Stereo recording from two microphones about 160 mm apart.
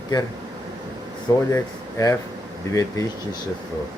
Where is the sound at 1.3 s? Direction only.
25° left (ahead or behind).